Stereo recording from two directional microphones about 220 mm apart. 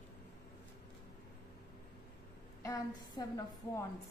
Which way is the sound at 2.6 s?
15° left (ahead or behind).